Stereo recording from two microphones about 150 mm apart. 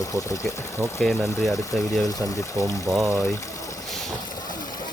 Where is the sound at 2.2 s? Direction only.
20° right (ahead or behind).